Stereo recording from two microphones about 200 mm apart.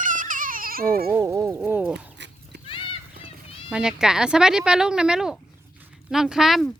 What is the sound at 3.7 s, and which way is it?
Speech, 5° right (ahead or behind).